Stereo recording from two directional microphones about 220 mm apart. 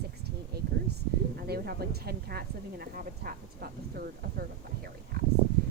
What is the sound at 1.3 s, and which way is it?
Speech, 45° right (ahead or behind).